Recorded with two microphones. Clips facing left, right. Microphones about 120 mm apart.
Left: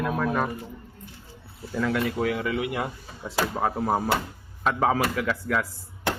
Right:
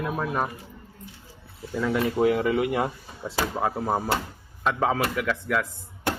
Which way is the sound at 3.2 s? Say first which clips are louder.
Even; centre (ahead or behind).